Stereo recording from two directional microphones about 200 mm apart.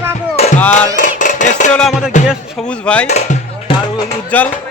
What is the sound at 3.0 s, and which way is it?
Music, 35° left (ahead or behind).